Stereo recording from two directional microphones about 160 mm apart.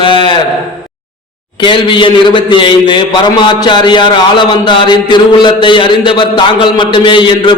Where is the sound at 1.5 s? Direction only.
30° left (ahead or behind).